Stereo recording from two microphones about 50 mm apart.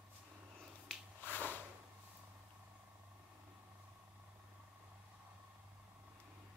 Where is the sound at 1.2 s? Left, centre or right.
Left.